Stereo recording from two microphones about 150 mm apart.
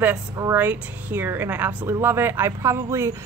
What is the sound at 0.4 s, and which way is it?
Speech, 15° right (ahead or behind).